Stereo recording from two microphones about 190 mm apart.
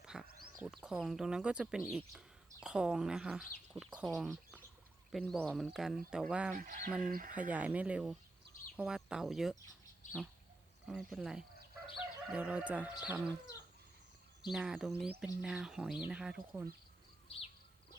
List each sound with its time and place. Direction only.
0.0 s a sound: 5° right (ahead or behind)
0.8 s speech: centre (ahead or behind)
6.6 s speech: 45° right (ahead or behind)
7.5 s speech: 10° right (ahead or behind)
10.0 s bird: 40° left (ahead or behind)
10.8 s speech: centre (ahead or behind)
14.5 s speech: centre (ahead or behind)
17.2 s bird: 30° left (ahead or behind)